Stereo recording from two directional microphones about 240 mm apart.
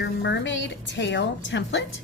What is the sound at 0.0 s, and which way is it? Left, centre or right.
A woman's voice, left.